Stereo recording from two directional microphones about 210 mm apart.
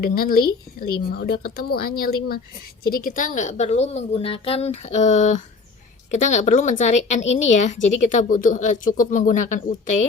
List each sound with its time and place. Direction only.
0.0 s a woman's voice: 45° left (ahead or behind)